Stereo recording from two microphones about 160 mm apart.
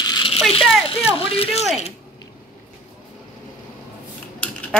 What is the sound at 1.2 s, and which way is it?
Speech, 35° left (ahead or behind).